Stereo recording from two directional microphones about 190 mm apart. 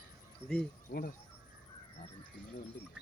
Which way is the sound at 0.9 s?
55° left (ahead or behind).